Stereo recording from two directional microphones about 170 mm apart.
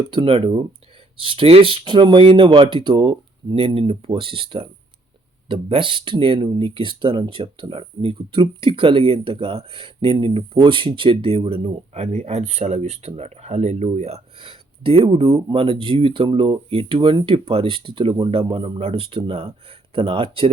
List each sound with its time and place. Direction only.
0.1 s speech: 30° right (ahead or behind)